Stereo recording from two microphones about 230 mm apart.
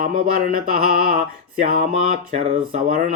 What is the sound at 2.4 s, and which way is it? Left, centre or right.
Speech, right.